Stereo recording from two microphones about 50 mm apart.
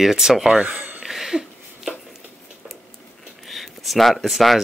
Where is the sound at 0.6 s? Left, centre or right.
Right.